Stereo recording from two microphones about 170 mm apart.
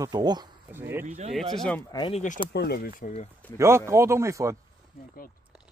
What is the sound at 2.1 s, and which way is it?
Speech, 45° left (ahead or behind).